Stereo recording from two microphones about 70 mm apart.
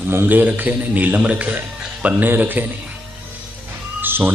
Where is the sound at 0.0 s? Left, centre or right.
Right.